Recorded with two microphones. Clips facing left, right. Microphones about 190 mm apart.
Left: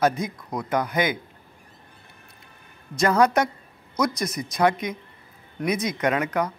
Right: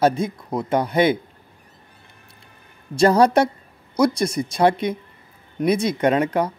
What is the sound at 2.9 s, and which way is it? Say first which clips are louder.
A woman's voice: right 5 dB; 30° right (ahead or behind).